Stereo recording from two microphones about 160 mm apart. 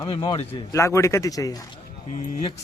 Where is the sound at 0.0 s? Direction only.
35° left (ahead or behind).